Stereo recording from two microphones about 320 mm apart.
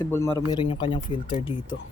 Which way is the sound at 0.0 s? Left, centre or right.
Centre.